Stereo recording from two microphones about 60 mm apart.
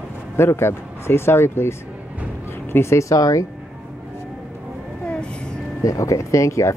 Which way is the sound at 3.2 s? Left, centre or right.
Left.